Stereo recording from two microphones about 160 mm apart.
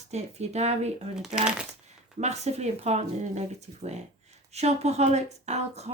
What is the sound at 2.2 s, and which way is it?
Speech, 45° right (ahead or behind).